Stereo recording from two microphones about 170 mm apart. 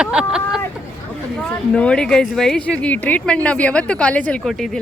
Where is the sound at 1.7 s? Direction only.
5° left (ahead or behind).